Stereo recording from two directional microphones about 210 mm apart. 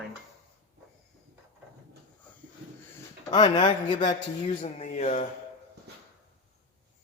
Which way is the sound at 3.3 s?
20° left (ahead or behind).